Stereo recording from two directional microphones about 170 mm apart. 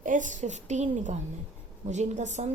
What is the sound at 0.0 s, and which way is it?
A woman's voice, 50° right (ahead or behind).